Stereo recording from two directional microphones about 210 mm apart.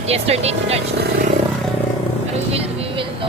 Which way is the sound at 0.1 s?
30° right (ahead or behind).